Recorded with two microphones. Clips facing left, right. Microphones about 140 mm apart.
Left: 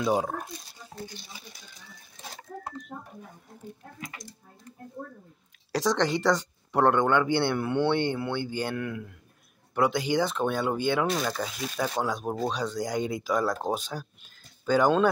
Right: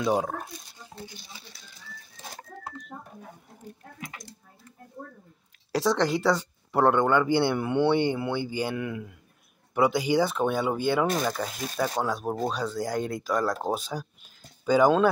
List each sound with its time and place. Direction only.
0.0 s speech: centre (ahead or behind)
4.0 s speech: 60° right (ahead or behind)
5.7 s speech: 5° right (ahead or behind)